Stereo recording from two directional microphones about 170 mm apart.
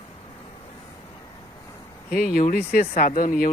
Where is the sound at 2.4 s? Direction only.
55° left (ahead or behind).